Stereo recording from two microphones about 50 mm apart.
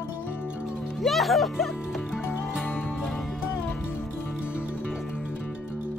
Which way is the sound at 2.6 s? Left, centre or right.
Left.